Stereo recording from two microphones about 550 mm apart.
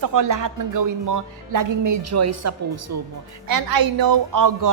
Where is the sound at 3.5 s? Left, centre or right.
Right.